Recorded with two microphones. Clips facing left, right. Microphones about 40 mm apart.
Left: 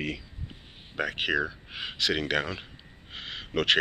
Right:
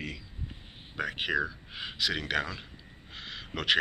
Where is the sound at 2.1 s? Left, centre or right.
Centre.